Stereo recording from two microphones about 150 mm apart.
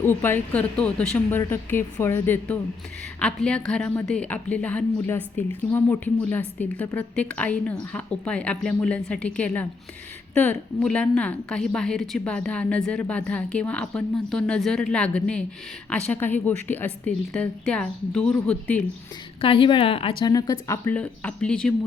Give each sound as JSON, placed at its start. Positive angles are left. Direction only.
{"t": 0.0, "sound": "a woman's voice", "side_deg": 15}
{"t": 19.4, "sound": "a woman's voice", "side_deg": 35}
{"t": 20.8, "sound": "a woman's voice", "side_deg": 10}